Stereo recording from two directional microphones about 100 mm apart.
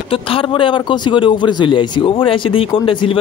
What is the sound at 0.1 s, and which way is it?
A man's voice, 65° left (ahead or behind).